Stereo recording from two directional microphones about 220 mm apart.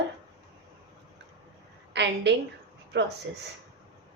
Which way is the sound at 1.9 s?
55° right (ahead or behind).